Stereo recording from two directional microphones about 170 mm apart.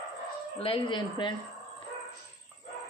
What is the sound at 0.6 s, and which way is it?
Speech, 30° left (ahead or behind).